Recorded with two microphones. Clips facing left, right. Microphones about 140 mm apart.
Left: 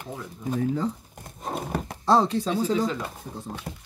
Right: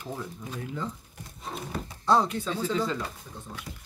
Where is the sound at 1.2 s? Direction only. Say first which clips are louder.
Left 6 dB; 50° left (ahead or behind).